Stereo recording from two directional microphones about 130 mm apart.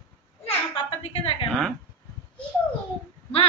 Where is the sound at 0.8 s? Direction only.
45° left (ahead or behind).